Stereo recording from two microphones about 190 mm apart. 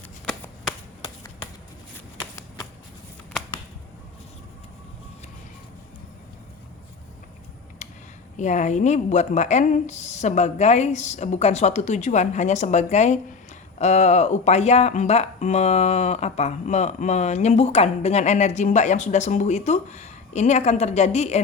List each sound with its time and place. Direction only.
0.3 s shuffling cards: 5° left (ahead or behind)
7.8 s a sound: 40° left (ahead or behind)
8.4 s speech: 40° left (ahead or behind)